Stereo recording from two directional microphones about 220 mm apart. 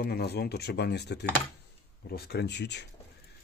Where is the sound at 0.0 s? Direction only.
45° left (ahead or behind).